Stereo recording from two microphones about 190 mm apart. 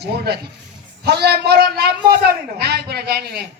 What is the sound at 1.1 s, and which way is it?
A man's voice, 60° right (ahead or behind).